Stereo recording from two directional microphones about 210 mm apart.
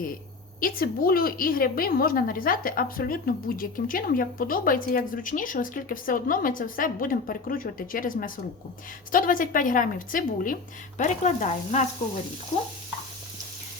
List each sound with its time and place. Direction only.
0.6 s a woman's voice: 45° left (ahead or behind)